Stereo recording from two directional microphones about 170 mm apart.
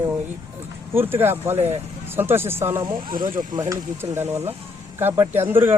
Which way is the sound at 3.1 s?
55° right (ahead or behind).